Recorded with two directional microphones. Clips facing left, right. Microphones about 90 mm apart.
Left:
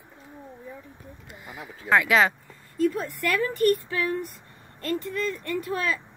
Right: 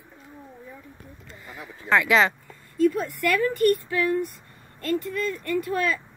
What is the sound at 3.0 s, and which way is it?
Speech, 35° left (ahead or behind).